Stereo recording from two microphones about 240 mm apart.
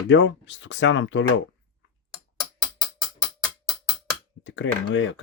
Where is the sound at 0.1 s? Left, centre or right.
Left.